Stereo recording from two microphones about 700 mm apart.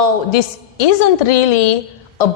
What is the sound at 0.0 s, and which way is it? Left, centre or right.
A woman's voice, left.